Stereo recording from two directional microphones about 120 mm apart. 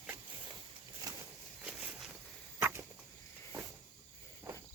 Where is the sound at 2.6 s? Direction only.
20° right (ahead or behind).